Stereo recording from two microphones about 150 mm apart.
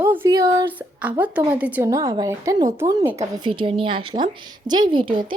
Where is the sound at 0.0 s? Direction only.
15° right (ahead or behind).